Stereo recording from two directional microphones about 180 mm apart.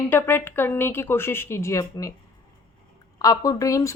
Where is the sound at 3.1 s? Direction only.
20° left (ahead or behind).